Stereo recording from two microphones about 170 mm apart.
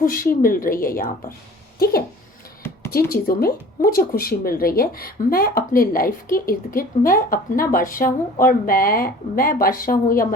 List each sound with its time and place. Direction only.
0.0 s a woman's voice: 55° left (ahead or behind)